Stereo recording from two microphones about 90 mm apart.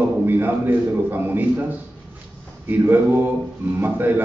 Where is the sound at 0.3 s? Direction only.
25° right (ahead or behind).